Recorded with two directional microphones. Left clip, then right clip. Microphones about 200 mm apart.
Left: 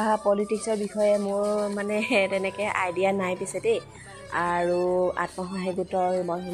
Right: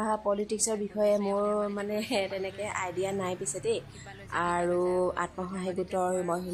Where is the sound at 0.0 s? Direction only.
10° left (ahead or behind).